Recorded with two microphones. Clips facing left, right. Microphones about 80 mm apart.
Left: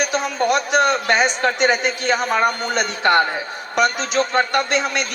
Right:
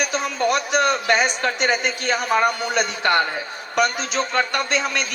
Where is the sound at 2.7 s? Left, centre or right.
Left.